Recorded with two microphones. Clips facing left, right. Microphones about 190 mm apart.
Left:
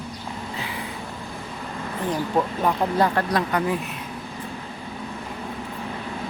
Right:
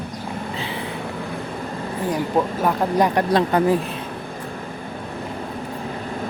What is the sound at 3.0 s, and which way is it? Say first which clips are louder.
Speech: right 4 dB; 20° right (ahead or behind).